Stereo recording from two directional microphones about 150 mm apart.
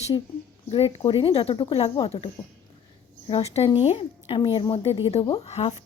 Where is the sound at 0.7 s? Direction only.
35° left (ahead or behind).